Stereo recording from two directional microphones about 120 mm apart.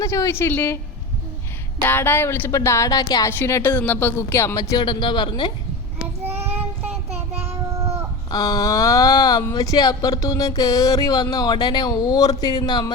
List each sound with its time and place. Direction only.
0.0 s speech: 25° left (ahead or behind)
1.8 s speech: 15° left (ahead or behind); by 3.2 s 35° left (ahead or behind)
3.2 s speech: 20° left (ahead or behind)
4.2 s a sound: 20° left (ahead or behind); by 5.5 s 40° left (ahead or behind)
7.3 s child singing: 20° right (ahead or behind)
8.3 s a sound: 35° left (ahead or behind)